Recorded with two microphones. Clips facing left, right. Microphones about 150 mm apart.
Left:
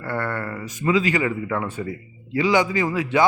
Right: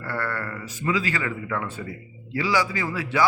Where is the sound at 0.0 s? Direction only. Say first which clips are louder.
Left 3 dB; 20° left (ahead or behind).